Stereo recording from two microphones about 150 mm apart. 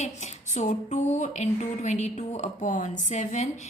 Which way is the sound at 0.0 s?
50° left (ahead or behind).